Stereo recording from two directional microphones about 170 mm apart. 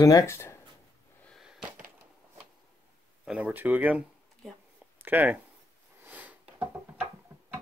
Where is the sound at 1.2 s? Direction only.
Centre (ahead or behind).